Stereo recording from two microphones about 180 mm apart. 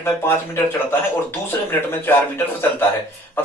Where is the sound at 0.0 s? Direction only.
15° left (ahead or behind).